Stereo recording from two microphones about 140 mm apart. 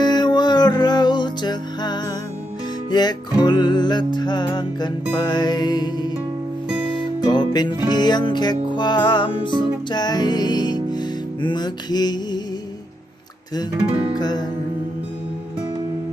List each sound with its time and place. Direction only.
0.0 s music: 30° left (ahead or behind)
7.3 s music: 30° left (ahead or behind)
14.2 s music: 30° left (ahead or behind)